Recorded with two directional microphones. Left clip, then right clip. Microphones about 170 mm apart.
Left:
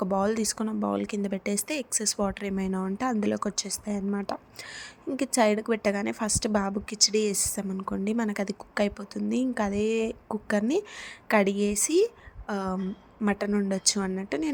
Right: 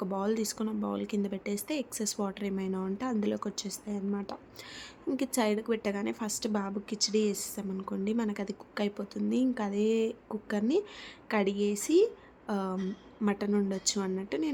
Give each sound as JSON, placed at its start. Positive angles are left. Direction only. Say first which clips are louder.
{"t": 0.0, "sound": "a woman's voice", "louder": "left 6 dB", "side_deg": 25}